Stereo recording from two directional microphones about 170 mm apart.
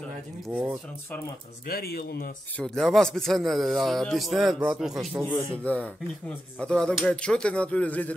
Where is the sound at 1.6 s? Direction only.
65° left (ahead or behind).